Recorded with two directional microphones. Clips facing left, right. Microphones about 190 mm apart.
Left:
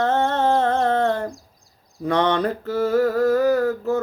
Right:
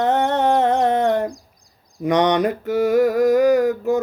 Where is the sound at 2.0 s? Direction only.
15° right (ahead or behind).